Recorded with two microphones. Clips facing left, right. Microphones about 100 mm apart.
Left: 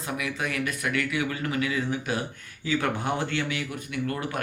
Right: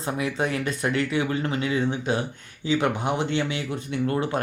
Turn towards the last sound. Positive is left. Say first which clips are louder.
# right 5 dB
turn(degrees=-25)  # may be behind; listen again after turning